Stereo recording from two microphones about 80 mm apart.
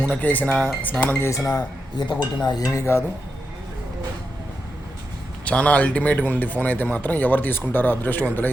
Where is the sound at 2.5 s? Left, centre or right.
Left.